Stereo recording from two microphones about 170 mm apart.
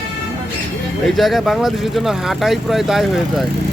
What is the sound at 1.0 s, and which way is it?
Speech, centre (ahead or behind).